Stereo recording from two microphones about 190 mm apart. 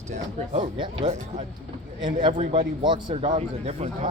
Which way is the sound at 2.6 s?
25° right (ahead or behind).